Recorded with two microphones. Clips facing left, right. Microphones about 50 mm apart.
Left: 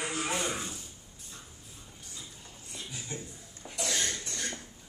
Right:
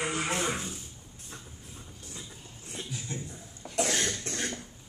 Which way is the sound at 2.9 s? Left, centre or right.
Centre.